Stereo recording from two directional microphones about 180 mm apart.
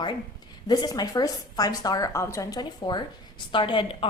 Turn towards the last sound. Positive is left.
turn(degrees=30)  # may be behind; listen again after turning